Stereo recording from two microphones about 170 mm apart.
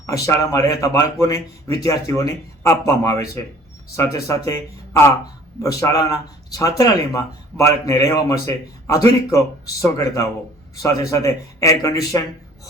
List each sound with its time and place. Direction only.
0.0 s a man's voice: 20° left (ahead or behind)